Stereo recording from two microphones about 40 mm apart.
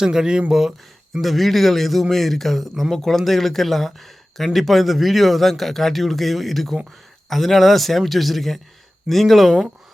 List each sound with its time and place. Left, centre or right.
0.0 s speech: centre
1.2 s speech: centre